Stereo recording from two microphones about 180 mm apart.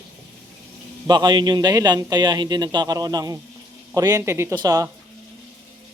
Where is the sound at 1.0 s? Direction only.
25° right (ahead or behind).